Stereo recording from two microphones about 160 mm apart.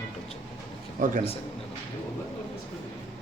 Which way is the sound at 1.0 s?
55° right (ahead or behind).